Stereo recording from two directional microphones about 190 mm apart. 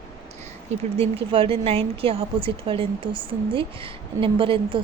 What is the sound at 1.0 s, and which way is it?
A woman's voice, 30° right (ahead or behind).